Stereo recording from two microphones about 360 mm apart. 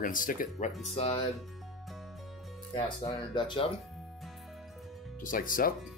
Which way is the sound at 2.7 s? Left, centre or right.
Centre.